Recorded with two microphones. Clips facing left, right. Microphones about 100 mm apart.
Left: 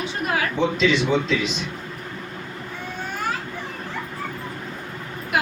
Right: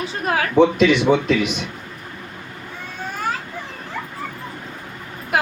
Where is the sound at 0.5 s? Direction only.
60° right (ahead or behind).